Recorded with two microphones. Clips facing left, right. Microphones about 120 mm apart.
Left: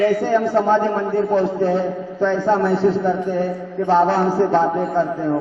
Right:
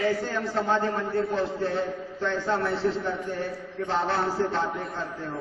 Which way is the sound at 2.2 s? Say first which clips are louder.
Left 10 dB; 50° left (ahead or behind).